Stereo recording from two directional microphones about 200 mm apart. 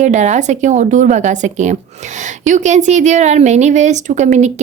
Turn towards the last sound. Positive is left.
turn(degrees=-35)  # may be behind; listen again after turning